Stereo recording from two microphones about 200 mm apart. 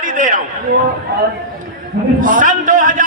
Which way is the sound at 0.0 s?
40° right (ahead or behind).